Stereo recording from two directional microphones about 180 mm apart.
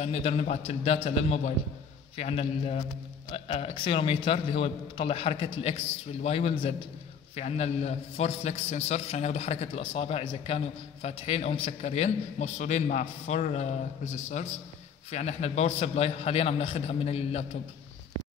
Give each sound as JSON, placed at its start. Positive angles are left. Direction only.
{"t": 0.0, "sound": "a man's voice", "side_deg": 35}